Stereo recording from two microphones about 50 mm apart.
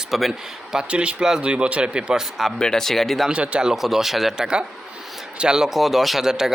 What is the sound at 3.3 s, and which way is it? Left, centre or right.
Speech, right.